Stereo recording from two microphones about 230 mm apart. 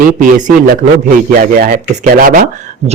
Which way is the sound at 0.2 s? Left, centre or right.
Right.